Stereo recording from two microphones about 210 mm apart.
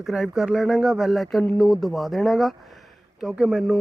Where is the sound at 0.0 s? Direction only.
Centre (ahead or behind).